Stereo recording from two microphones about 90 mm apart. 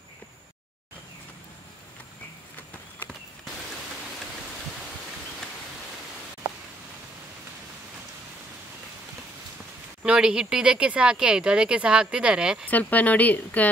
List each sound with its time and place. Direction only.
10.0 s speech: 10° right (ahead or behind)
12.6 s speech: 15° left (ahead or behind)